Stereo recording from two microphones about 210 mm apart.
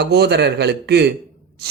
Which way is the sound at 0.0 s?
50° right (ahead or behind).